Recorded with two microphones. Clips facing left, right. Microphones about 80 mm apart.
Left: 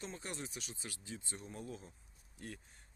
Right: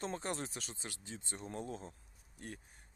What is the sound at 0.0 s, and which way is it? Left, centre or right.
Speech, right.